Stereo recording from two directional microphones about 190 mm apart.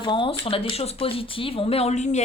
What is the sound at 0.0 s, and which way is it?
A woman's voice, 25° left (ahead or behind).